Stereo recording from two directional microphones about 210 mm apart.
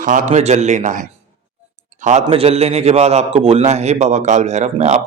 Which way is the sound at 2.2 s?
25° right (ahead or behind).